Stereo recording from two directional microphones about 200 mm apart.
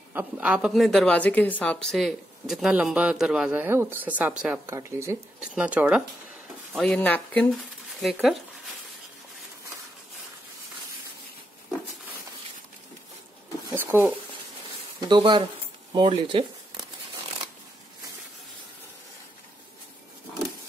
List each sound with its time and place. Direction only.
0.1 s speech: 10° right (ahead or behind)
6.9 s speech: 10° left (ahead or behind)
13.7 s a sound: 10° right (ahead or behind)
15.0 s speech: 25° right (ahead or behind)